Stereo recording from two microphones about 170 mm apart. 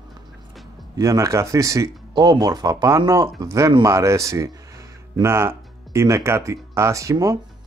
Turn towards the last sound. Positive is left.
turn(degrees=-20)  # may be behind; listen again after turning